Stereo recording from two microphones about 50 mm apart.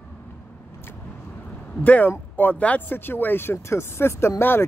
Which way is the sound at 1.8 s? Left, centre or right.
Left.